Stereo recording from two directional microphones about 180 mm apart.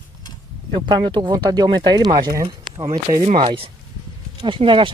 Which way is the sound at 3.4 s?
30° right (ahead or behind).